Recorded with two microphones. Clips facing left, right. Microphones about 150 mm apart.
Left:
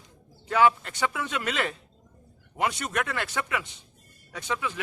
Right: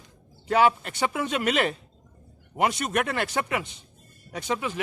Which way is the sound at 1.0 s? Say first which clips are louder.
Right 3 dB; 35° right (ahead or behind).